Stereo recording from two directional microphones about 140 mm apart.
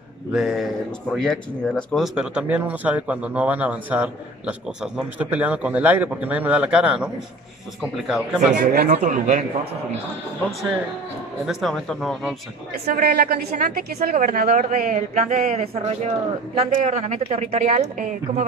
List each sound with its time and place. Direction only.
0.3 s speech: 5° right (ahead or behind)
2.1 s speech: 10° right (ahead or behind)
8.5 s a woman's voice: 65° right (ahead or behind)
11.4 s speech: centre (ahead or behind)
12.9 s a woman's voice: 90° right; by 17.0 s 45° right (ahead or behind)
17.0 s a woman's voice: 55° right (ahead or behind)